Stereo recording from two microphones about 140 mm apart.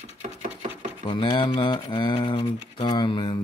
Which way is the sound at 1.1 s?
35° left (ahead or behind).